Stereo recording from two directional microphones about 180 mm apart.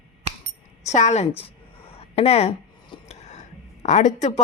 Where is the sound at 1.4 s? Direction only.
35° left (ahead or behind).